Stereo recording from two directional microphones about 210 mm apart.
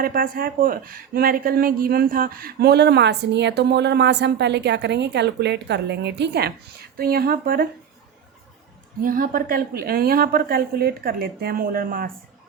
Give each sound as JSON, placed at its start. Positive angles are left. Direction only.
{"t": 0.0, "sound": "speech", "side_deg": -45}
{"t": 9.0, "sound": "speech", "side_deg": -40}